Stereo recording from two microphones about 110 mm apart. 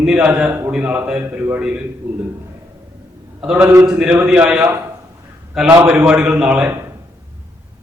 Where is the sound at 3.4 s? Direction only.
10° right (ahead or behind).